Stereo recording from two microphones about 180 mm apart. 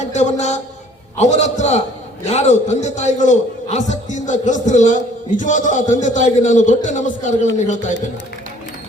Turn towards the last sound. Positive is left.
turn(degrees=40)  # may be behind; listen again after turning